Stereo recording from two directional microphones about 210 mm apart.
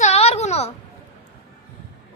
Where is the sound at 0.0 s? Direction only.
30° left (ahead or behind).